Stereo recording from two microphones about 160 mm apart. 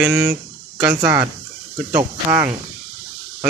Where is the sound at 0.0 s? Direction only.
15° right (ahead or behind).